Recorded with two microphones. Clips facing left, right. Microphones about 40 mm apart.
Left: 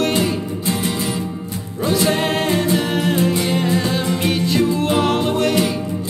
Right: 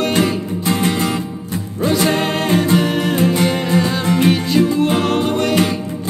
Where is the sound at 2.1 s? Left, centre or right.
Centre.